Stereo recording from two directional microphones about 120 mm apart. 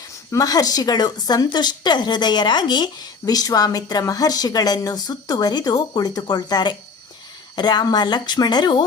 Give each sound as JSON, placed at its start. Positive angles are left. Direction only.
{"t": 0.3, "sound": "a woman's voice", "side_deg": 30}